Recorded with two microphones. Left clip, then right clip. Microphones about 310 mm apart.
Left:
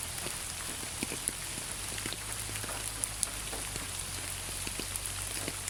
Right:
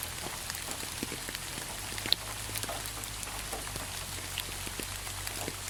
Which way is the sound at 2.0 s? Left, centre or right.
Centre.